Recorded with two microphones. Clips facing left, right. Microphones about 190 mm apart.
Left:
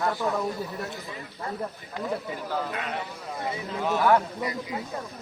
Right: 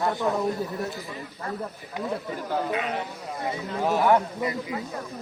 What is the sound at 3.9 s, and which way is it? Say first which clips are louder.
Speech: right 1 dB; 20° right (ahead or behind).